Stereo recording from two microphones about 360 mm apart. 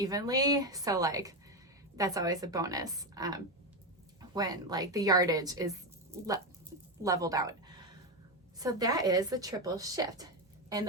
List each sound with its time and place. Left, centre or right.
0.0 s a woman's voice: centre
8.5 s a woman's voice: centre